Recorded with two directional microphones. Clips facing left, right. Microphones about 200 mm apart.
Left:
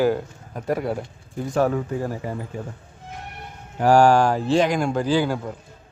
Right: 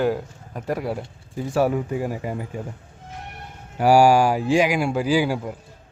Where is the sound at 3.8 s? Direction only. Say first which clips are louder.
Even; 10° right (ahead or behind).